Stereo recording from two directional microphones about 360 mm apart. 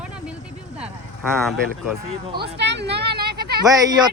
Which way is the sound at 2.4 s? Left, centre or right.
Right.